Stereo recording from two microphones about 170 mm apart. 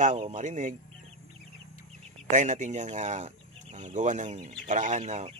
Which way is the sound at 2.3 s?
45° right (ahead or behind).